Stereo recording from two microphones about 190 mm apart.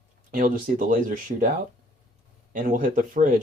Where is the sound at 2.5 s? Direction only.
45° right (ahead or behind).